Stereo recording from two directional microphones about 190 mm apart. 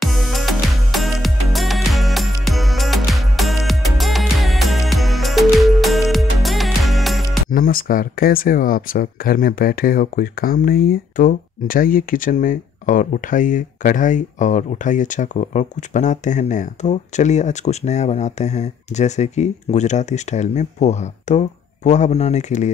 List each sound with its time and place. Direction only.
0.0 s music: centre (ahead or behind)
7.5 s speech: 50° left (ahead or behind)